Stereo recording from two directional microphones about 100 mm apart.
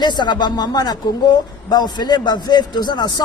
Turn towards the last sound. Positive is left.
turn(degrees=45)  # may be behind; listen again after turning